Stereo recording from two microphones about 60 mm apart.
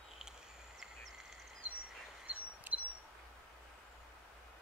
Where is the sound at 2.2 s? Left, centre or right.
Right.